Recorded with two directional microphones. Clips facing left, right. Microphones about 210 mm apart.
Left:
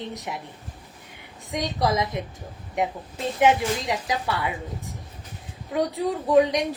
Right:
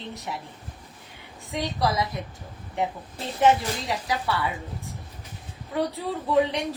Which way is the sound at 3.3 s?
15° left (ahead or behind).